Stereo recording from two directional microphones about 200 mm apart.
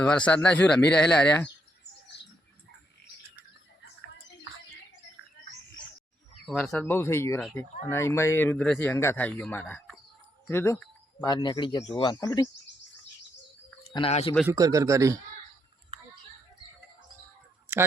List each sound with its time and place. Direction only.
0.0 s speech: 5° left (ahead or behind)
2.1 s bird: 60° left (ahead or behind)
6.4 s speech: 5° left (ahead or behind)
13.9 s speech: 30° left (ahead or behind)
14.4 s a man's voice: 15° right (ahead or behind)
17.7 s a sound: 10° right (ahead or behind)